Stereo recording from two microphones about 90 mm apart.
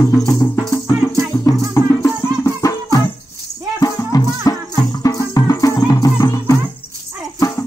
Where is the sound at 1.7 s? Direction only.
35° left (ahead or behind).